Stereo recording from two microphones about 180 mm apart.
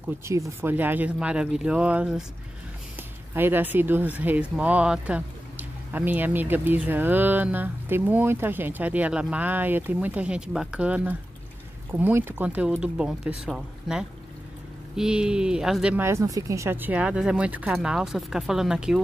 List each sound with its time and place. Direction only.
0.2 s speech: 15° right (ahead or behind)
3.3 s speech: 10° right (ahead or behind)